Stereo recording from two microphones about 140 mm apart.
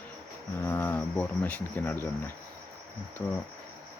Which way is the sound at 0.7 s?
15° left (ahead or behind).